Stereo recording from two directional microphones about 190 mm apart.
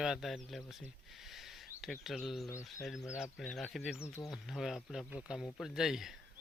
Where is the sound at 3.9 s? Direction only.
10° left (ahead or behind).